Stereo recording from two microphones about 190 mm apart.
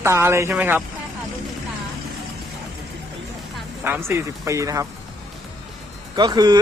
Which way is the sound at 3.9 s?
10° right (ahead or behind).